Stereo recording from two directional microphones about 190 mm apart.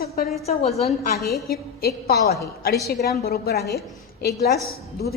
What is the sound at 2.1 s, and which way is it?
A woman's voice, 55° left (ahead or behind).